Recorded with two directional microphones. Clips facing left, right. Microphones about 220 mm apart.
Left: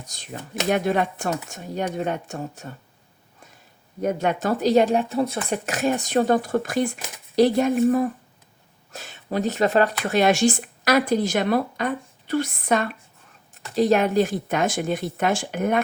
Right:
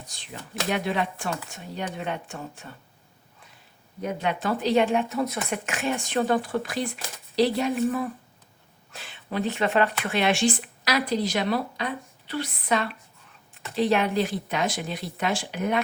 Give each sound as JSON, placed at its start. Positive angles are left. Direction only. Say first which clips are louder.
{"t": 0.0, "sound": "speech", "louder": "left 5 dB", "side_deg": 40}
{"t": 4.0, "sound": "speech", "louder": "left 5 dB", "side_deg": 45}